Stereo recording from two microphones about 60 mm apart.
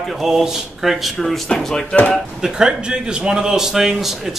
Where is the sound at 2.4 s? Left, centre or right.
Centre.